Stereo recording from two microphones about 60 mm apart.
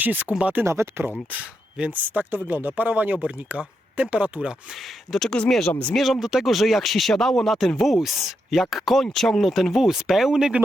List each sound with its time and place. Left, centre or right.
0.0 s speech: right
0.6 s speech: right
1.3 s speech: right
4.7 s speech: centre
6.0 s speech: centre